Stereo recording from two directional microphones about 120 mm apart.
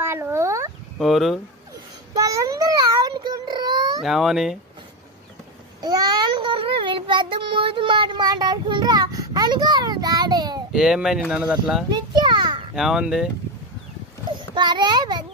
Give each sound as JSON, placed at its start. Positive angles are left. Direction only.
{"t": 0.0, "sound": "a sound", "side_deg": -20}
{"t": 0.9, "sound": "a child's voice", "side_deg": 0}
{"t": 2.1, "sound": "a sound", "side_deg": -30}
{"t": 4.0, "sound": "a child's voice", "side_deg": -5}
{"t": 5.8, "sound": "child singing", "side_deg": -35}
{"t": 10.7, "sound": "speech", "side_deg": -5}
{"t": 11.9, "sound": "a sound", "side_deg": -40}
{"t": 12.7, "sound": "a child's voice", "side_deg": -5}
{"t": 14.5, "sound": "child singing", "side_deg": -40}